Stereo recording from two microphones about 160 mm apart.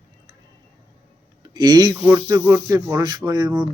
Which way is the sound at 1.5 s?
25° right (ahead or behind).